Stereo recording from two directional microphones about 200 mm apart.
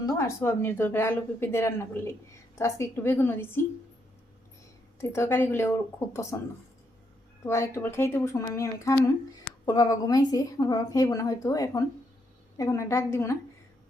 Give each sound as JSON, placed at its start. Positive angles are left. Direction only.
{"t": 0.0, "sound": "a woman's voice", "side_deg": 15}
{"t": 4.9, "sound": "a woman's voice", "side_deg": 15}